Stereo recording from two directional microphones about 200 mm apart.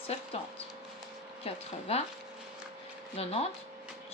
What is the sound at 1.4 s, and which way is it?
Speech, 30° left (ahead or behind).